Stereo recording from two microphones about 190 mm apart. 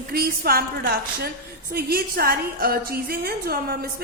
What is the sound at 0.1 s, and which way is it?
A woman's voice, 55° right (ahead or behind).